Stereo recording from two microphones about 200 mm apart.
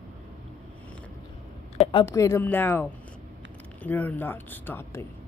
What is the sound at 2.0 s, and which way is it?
Speech, 15° left (ahead or behind).